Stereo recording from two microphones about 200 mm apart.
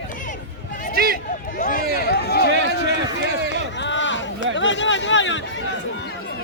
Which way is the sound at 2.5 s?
65° right (ahead or behind).